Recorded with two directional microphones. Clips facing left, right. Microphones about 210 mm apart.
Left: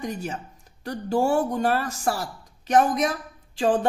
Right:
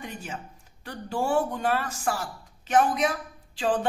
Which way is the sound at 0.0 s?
40° left (ahead or behind).